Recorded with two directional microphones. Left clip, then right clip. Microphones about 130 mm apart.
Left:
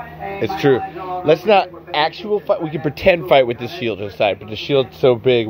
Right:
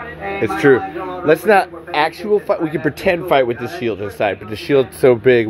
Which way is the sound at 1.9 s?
10° right (ahead or behind).